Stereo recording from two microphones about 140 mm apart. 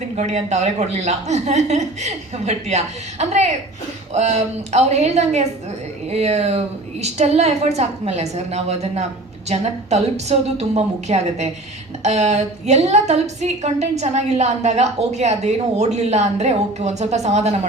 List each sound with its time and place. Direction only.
0.2 s a woman's voice: 50° right (ahead or behind)